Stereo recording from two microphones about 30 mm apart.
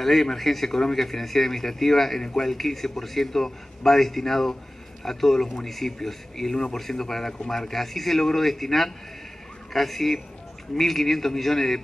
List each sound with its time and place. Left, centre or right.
0.0 s a man's voice: centre
0.7 s speech: centre
0.9 s a man's voice: centre
2.5 s a man's voice: centre
6.5 s a man's voice: left
7.5 s a man's voice: centre